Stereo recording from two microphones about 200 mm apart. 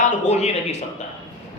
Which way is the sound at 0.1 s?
35° left (ahead or behind).